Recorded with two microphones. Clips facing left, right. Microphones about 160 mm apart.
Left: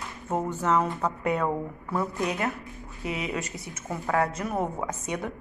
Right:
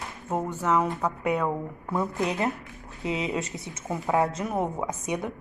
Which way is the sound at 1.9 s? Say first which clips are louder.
Right 1 dB; 20° right (ahead or behind).